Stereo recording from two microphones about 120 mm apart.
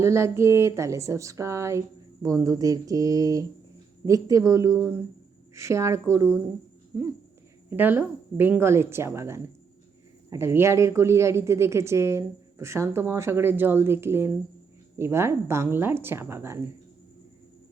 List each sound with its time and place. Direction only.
0.0 s a woman's voice: 25° right (ahead or behind)
7.7 s a woman's voice: 15° right (ahead or behind)